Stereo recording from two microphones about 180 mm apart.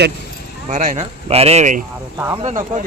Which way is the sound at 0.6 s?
45° right (ahead or behind).